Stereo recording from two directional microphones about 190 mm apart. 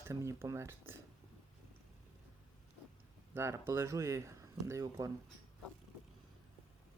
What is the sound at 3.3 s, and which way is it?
Speech, 15° right (ahead or behind).